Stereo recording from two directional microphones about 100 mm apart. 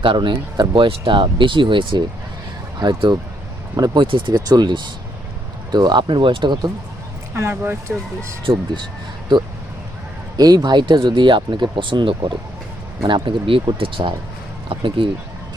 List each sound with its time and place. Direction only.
0.0 s speech: 55° right (ahead or behind)
4.0 s speech: 60° right (ahead or behind)
4.4 s speech: 45° right (ahead or behind)
7.3 s speech: 25° right (ahead or behind)
10.3 s speech: 40° right (ahead or behind); by 15.1 s 60° right (ahead or behind)